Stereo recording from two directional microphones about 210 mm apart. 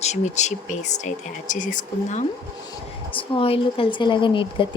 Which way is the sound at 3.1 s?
25° left (ahead or behind).